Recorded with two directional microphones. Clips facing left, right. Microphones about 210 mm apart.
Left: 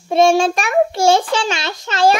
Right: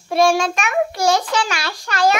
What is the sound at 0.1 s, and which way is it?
A child's voice, 25° left (ahead or behind).